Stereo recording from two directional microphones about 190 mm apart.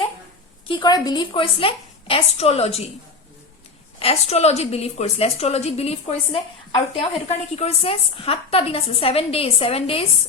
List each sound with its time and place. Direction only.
0.7 s a woman's voice: 20° left (ahead or behind)
4.0 s a woman's voice: 35° left (ahead or behind)